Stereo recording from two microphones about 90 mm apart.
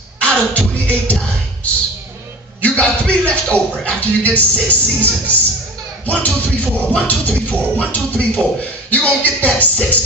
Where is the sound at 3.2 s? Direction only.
10° left (ahead or behind).